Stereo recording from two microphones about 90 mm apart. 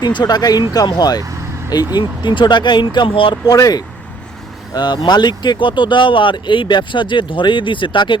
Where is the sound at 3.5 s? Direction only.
45° left (ahead or behind).